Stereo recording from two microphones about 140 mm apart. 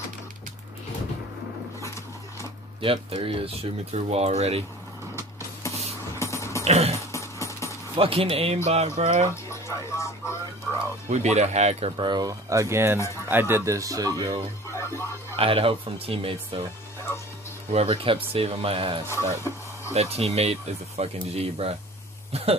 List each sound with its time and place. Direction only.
2.8 s speech: 40° right (ahead or behind)
6.1 s dog: 20° left (ahead or behind)
6.6 s dog: 50° right (ahead or behind)
7.0 s dog: 20° left (ahead or behind)
7.9 s speech: 40° right (ahead or behind)
9.3 s speech: 20° left (ahead or behind)
11.1 s speech: 55° right (ahead or behind)
12.0 s speech: 30° right (ahead or behind)
14.7 s music: 20° left (ahead or behind)
15.3 s speech: 40° right (ahead or behind)
17.7 s speech: 40° right (ahead or behind)
19.0 s speech: 20° left (ahead or behind)
19.9 s speech: 45° right (ahead or behind)